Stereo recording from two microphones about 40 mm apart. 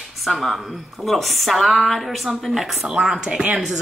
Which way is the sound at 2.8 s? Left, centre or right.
Right.